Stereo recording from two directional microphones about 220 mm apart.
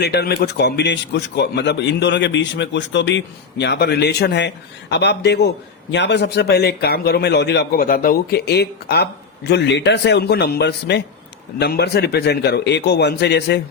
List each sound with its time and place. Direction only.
0.0 s a man's voice: 45° left (ahead or behind)